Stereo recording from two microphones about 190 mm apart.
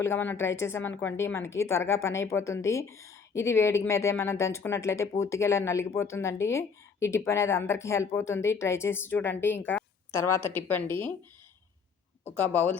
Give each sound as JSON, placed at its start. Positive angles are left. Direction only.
{"t": 0.0, "sound": "a woman's voice", "side_deg": 10}
{"t": 12.4, "sound": "a woman's voice", "side_deg": 10}